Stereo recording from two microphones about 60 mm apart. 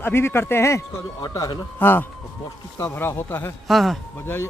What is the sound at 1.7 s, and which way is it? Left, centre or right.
Speech, left.